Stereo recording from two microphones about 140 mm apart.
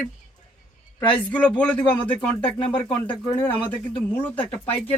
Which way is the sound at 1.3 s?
10° left (ahead or behind).